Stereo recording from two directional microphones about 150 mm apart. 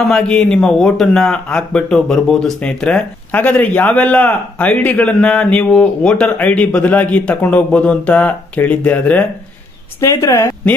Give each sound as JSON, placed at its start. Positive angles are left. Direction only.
{"t": 0.1, "sound": "a woman's voice", "side_deg": 5}